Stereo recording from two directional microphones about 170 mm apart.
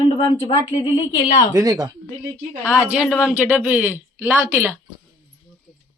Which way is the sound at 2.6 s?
5° right (ahead or behind).